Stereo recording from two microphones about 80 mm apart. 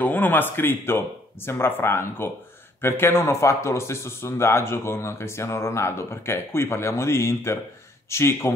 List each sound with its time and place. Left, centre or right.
0.0 s speech: left